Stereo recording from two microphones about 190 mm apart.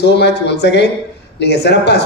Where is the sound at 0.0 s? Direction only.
60° left (ahead or behind).